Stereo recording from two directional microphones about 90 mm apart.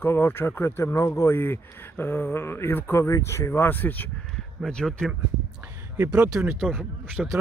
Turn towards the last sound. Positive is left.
turn(degrees=0)  # may be behind; listen again after turning